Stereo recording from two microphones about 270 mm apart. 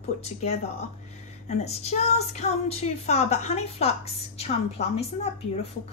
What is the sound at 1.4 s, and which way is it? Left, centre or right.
Music, left.